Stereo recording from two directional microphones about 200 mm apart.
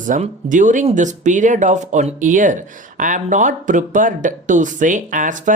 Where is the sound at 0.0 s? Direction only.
40° right (ahead or behind).